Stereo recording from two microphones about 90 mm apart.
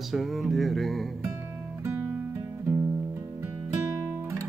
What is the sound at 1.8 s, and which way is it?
Guitar, 20° right (ahead or behind).